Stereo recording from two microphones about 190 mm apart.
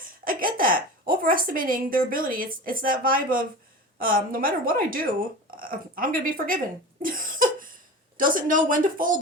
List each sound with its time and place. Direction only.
0.3 s a woman's voice: 50° right (ahead or behind)
7.0 s cough: 45° right (ahead or behind)
8.2 s speech: 45° right (ahead or behind)